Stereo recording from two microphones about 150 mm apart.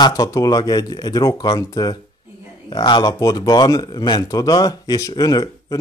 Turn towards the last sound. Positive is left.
turn(degrees=25)  # may be behind; listen again after turning